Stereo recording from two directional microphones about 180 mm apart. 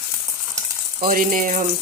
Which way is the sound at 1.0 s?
50° right (ahead or behind).